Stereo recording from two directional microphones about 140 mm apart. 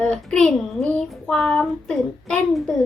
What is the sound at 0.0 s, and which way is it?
A child's voice, 5° left (ahead or behind).